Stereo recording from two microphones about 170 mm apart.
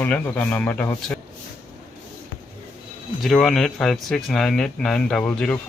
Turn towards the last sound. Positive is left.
turn(degrees=5)  # may be behind; listen again after turning